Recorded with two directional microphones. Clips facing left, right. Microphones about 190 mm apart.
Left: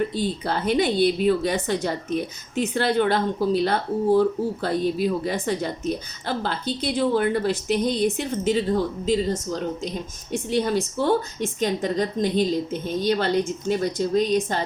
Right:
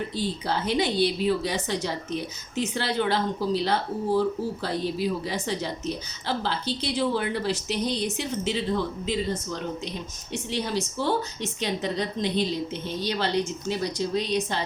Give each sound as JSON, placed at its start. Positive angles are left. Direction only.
{"t": 0.1, "sound": "a woman's voice", "side_deg": 55}
{"t": 10.3, "sound": "a woman's voice", "side_deg": 50}